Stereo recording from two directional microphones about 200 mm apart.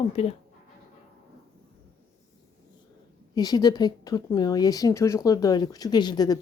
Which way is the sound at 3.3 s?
20° left (ahead or behind).